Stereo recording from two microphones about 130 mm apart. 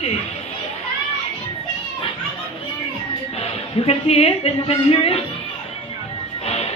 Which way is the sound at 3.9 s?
50° left (ahead or behind).